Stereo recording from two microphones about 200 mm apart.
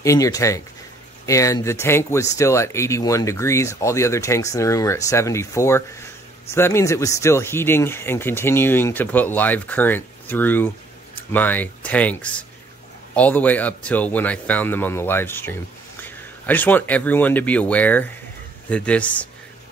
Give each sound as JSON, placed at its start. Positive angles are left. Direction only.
{"t": 0.0, "sound": "speech", "side_deg": 15}